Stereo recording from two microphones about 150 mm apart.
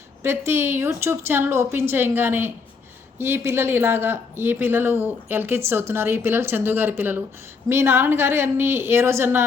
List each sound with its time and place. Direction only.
0.2 s speech: 15° right (ahead or behind)